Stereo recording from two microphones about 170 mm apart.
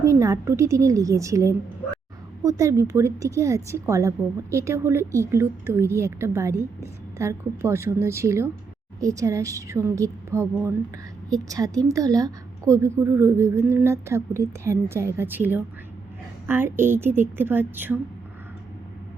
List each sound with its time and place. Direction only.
0.0 s a woman's voice: 20° right (ahead or behind)